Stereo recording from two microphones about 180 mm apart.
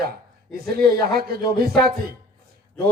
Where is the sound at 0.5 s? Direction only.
60° right (ahead or behind).